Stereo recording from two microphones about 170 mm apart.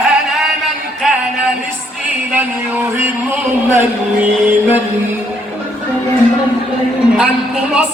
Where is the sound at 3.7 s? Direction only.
10° right (ahead or behind).